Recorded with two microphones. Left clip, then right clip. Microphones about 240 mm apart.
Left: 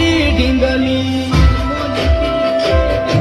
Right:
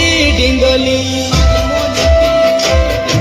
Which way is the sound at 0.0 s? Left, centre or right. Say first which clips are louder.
Right 3 dB; right.